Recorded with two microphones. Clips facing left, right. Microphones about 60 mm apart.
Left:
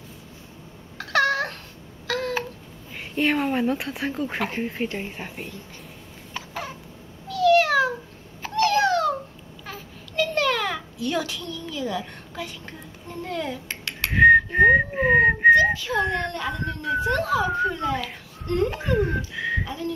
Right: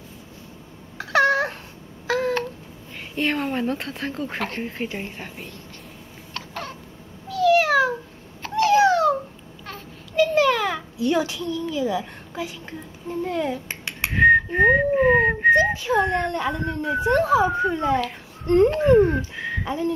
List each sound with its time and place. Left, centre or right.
0.9 s a sound: centre
2.0 s babbling: centre
3.2 s speech: centre
6.3 s a sound: centre
7.2 s cat: centre
8.5 s a sound: centre
9.7 s babbling: centre
13.1 s dishes: centre
14.1 s whistling: centre
15.5 s speech: right
18.4 s speech: right
19.6 s whistling: right